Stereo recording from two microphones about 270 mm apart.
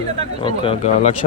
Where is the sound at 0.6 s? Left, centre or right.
Left.